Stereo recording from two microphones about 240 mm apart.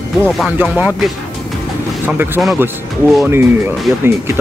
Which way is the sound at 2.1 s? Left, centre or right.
Centre.